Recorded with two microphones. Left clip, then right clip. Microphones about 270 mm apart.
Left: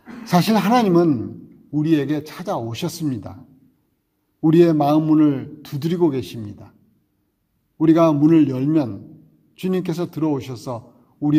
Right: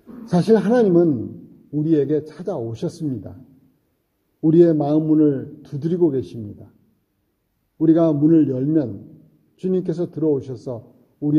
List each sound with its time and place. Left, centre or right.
0.2 s a man's voice: left
4.5 s a man's voice: left
7.8 s a man's voice: left